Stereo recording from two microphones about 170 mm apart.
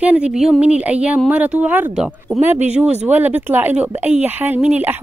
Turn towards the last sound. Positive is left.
turn(degrees=-10)  # may be behind; listen again after turning